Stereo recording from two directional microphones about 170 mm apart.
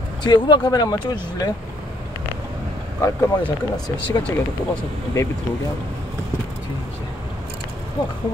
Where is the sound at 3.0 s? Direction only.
15° left (ahead or behind).